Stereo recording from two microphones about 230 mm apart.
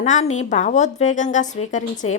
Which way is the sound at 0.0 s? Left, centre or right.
Left.